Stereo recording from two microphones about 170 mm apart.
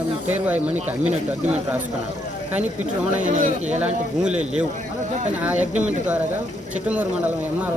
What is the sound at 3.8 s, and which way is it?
Speech, 5° right (ahead or behind).